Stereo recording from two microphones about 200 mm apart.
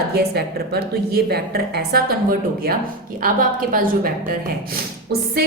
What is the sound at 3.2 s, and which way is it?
A woman's voice, 45° right (ahead or behind).